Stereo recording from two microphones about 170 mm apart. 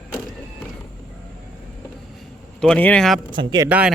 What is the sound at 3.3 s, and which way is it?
Speech, 25° right (ahead or behind).